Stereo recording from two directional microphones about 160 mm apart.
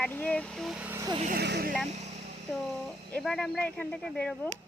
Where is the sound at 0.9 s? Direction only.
25° right (ahead or behind).